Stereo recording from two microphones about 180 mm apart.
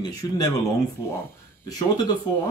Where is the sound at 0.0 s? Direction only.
20° left (ahead or behind).